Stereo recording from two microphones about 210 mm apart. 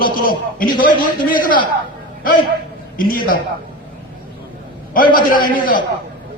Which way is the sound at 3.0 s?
40° left (ahead or behind).